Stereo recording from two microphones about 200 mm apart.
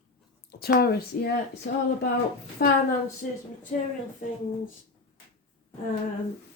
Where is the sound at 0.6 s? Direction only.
50° left (ahead or behind).